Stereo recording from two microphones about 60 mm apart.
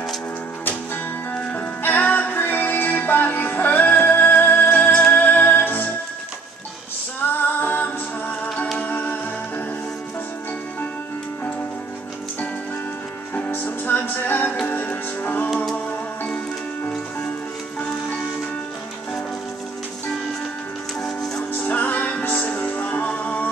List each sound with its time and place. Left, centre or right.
1.3 s music: left
7.3 s music: left
13.3 s music: left
21.5 s music: left